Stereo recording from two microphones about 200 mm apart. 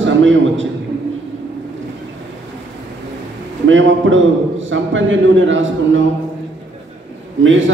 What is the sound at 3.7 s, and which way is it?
A man's voice, 70° right (ahead or behind).